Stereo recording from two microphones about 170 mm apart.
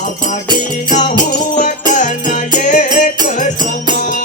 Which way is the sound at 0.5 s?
45° left (ahead or behind).